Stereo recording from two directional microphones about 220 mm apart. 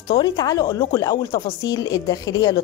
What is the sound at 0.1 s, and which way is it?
Speech, 20° left (ahead or behind).